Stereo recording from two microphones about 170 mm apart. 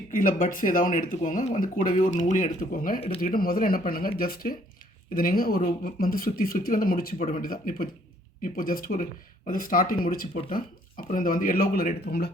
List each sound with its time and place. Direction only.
0.1 s speech: 55° left (ahead or behind)
7.2 s speech: 45° left (ahead or behind); by 12.3 s 70° left (ahead or behind)